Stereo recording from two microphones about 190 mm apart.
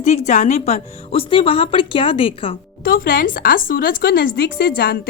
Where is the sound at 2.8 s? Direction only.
50° left (ahead or behind).